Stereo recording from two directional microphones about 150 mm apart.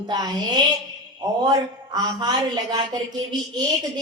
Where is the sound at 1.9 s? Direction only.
25° right (ahead or behind).